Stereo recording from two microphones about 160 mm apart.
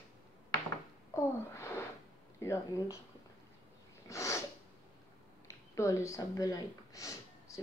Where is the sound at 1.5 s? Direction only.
15° left (ahead or behind).